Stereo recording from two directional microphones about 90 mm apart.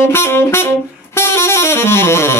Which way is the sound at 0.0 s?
25° left (ahead or behind).